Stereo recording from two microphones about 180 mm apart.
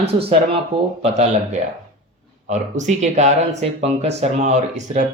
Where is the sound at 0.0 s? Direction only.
35° right (ahead or behind).